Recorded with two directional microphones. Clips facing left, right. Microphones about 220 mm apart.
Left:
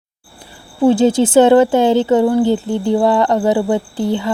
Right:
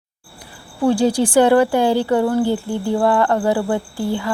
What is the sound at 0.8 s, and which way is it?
A woman's voice, 20° left (ahead or behind).